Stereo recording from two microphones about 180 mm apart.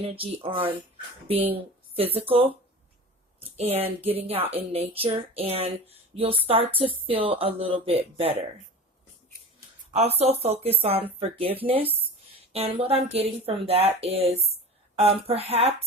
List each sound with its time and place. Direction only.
0.0 s speech: 30° right (ahead or behind)
2.1 s speech: 30° right (ahead or behind)
9.9 s speech: 35° right (ahead or behind)